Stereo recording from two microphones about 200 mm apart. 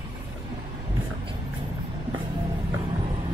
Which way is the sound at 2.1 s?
25° right (ahead or behind).